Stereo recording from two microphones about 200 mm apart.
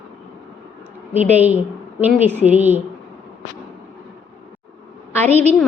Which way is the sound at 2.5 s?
10° right (ahead or behind).